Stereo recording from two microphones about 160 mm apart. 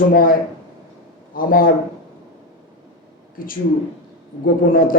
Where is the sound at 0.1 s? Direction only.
65° left (ahead or behind).